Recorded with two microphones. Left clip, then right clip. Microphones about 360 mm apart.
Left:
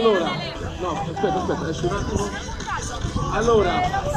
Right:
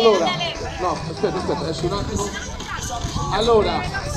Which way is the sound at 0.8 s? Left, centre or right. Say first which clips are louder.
Right 1 dB; right.